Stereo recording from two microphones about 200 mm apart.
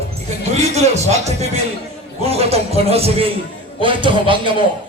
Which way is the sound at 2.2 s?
30° right (ahead or behind).